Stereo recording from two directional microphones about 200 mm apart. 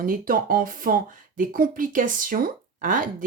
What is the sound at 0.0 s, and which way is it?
Speech, 45° right (ahead or behind).